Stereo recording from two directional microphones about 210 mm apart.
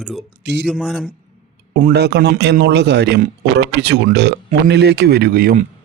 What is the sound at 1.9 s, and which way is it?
Speech, 50° right (ahead or behind).